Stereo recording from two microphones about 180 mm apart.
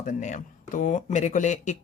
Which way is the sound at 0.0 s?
45° left (ahead or behind).